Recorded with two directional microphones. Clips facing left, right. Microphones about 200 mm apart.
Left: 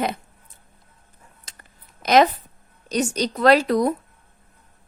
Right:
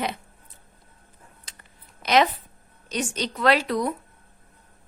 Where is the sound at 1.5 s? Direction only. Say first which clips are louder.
Left 4 dB; 45° left (ahead or behind).